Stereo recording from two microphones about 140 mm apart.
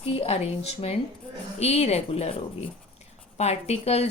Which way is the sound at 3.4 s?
50° left (ahead or behind).